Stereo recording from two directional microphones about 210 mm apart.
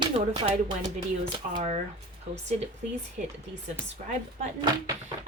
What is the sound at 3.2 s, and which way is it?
Speech, 40° right (ahead or behind).